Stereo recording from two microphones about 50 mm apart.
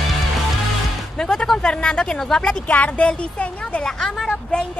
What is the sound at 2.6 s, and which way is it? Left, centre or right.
Speech, left.